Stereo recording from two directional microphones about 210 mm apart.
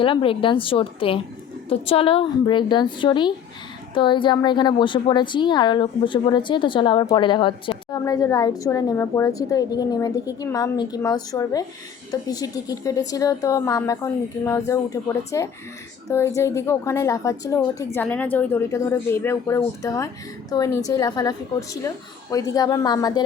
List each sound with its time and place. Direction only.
0.0 s a woman's voice: 25° left (ahead or behind)